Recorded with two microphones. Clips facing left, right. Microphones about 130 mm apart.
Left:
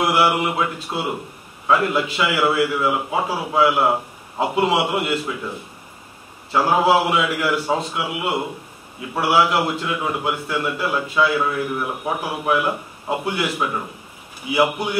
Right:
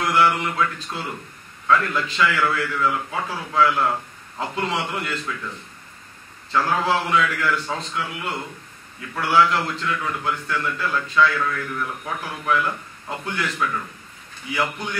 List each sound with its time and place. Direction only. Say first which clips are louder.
0.0 s a man's voice: left 2 dB; 15° left (ahead or behind)